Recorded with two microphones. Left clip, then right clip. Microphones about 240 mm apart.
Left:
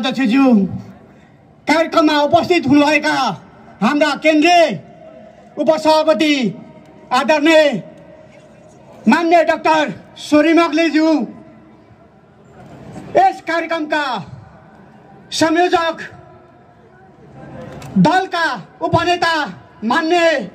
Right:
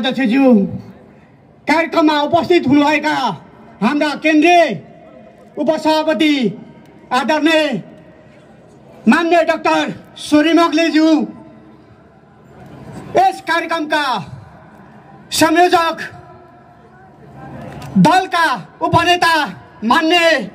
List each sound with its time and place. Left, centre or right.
0.0 s a man's voice: left
9.0 s a man's voice: left; by 11.2 s centre
13.1 s a man's voice: centre
15.2 s a man's voice: right
18.0 s a man's voice: right